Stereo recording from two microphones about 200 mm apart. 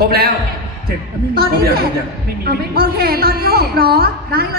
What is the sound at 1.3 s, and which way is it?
A woman's voice, 50° right (ahead or behind).